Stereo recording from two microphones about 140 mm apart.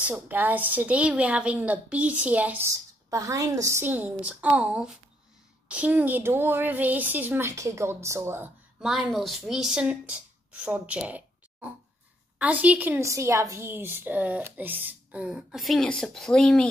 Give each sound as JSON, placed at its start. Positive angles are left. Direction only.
{"t": 0.0, "sound": "a woman's voice", "side_deg": -10}
{"t": 2.7, "sound": "a woman's voice", "side_deg": -25}
{"t": 8.8, "sound": "a woman's voice", "side_deg": 0}